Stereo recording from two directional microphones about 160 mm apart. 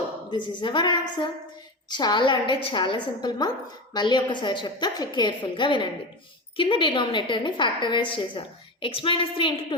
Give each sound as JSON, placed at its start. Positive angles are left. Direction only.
{"t": 0.3, "sound": "a woman's voice", "side_deg": 30}